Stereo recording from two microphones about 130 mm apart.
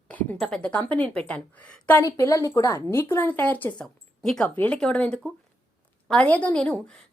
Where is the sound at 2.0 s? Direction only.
25° left (ahead or behind).